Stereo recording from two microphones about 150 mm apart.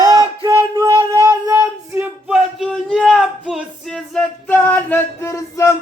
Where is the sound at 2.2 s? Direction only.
Centre (ahead or behind); by 5.7 s 20° left (ahead or behind).